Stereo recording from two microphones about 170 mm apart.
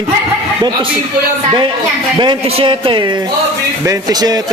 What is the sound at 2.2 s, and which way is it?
Speech, 30° right (ahead or behind).